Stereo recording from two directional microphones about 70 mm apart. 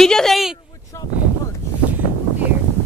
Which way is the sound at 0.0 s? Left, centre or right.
Centre.